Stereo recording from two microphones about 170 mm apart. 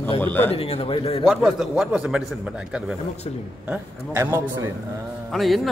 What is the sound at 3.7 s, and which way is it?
A man's voice, 10° right (ahead or behind).